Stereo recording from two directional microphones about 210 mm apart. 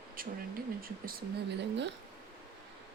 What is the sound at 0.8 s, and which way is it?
Speech, 45° right (ahead or behind).